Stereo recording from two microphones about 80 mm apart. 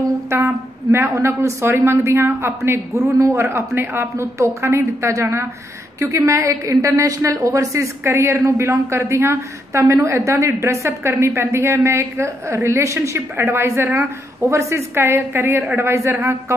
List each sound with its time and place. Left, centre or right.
0.3 s a woman's voice: right